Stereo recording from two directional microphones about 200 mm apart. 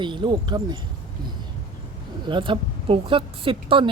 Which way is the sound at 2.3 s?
25° right (ahead or behind).